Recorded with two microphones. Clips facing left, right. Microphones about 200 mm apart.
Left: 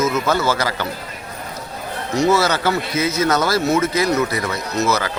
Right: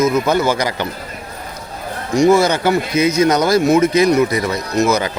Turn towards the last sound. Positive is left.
turn(degrees=-15)  # may be behind; listen again after turning